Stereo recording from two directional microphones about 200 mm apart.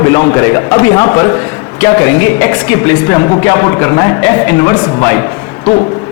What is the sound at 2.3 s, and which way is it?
A woman's voice, 10° left (ahead or behind).